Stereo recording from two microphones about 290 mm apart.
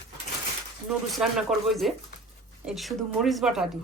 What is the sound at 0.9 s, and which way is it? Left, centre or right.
A woman's voice, centre.